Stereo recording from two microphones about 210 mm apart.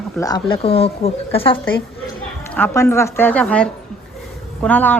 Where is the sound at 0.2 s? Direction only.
20° left (ahead or behind).